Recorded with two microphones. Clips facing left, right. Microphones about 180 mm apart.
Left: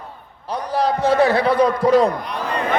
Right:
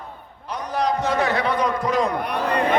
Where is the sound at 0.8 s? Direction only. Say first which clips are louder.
Left 5 dB; 30° left (ahead or behind).